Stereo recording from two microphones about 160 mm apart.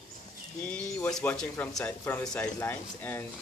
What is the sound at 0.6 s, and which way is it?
Speech, 5° left (ahead or behind).